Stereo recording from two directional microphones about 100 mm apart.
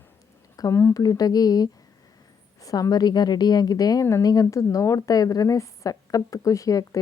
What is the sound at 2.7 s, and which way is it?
A woman's voice, 40° left (ahead or behind).